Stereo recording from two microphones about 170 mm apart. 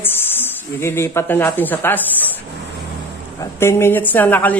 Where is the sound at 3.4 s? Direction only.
15° left (ahead or behind).